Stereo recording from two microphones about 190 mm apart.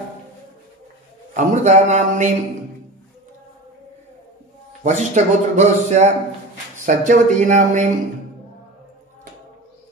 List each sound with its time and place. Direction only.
1.3 s speech: 40° right (ahead or behind)
4.8 s speech: 35° right (ahead or behind)